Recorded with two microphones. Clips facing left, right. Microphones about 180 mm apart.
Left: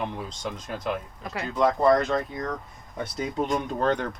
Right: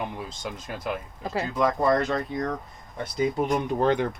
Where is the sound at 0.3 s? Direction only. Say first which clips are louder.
Left 2 dB; 5° right (ahead or behind).